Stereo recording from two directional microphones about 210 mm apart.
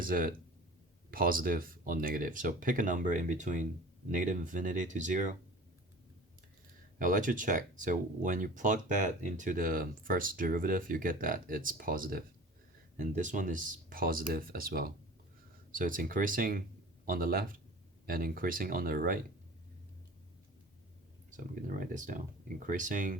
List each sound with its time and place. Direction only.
0.0 s speech: 45° right (ahead or behind)
7.0 s speech: 40° right (ahead or behind)
21.2 s speech: 40° right (ahead or behind)